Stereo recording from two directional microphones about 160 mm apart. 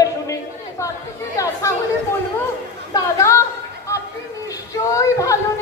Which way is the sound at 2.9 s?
20° left (ahead or behind).